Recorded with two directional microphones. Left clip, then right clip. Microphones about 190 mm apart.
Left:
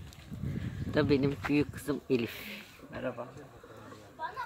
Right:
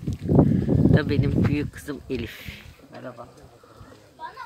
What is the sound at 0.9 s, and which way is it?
Speech, 5° left (ahead or behind).